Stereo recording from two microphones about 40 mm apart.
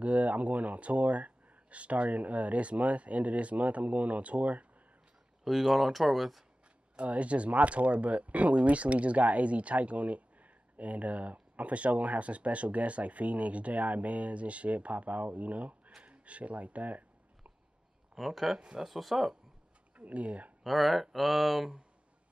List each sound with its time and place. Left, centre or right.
0.0 s speech: right
5.4 s speech: centre
7.0 s speech: right
18.1 s speech: centre
20.0 s speech: right
20.6 s speech: centre